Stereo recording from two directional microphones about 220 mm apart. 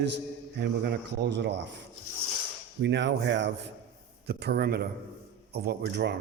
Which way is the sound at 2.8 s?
55° right (ahead or behind).